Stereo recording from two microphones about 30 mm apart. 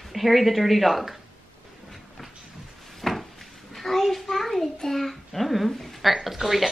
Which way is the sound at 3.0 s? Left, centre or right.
Centre.